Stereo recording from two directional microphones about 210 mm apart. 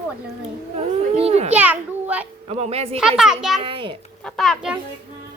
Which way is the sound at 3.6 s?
25° right (ahead or behind).